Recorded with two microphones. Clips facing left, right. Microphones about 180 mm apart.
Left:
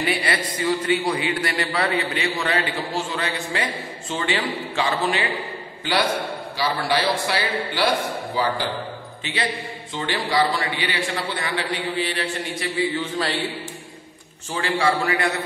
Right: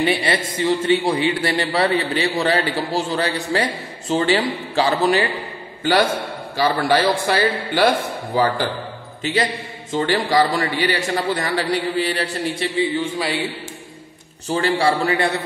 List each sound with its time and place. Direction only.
0.0 s a man's voice: 25° right (ahead or behind)
6.5 s a man's voice: 45° right (ahead or behind)
13.0 s speech: 10° right (ahead or behind)
14.5 s a man's voice: 35° right (ahead or behind)